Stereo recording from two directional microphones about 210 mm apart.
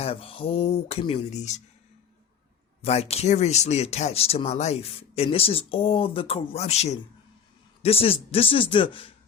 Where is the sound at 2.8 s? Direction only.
30° left (ahead or behind).